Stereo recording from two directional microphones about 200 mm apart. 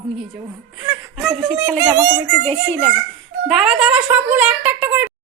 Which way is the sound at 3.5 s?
5° right (ahead or behind).